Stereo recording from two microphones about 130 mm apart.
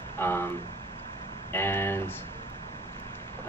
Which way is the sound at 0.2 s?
15° left (ahead or behind).